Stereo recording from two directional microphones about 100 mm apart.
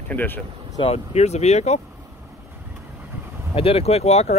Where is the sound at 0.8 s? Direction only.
90° left.